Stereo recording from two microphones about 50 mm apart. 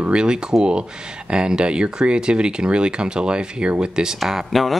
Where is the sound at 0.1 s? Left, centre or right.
Centre.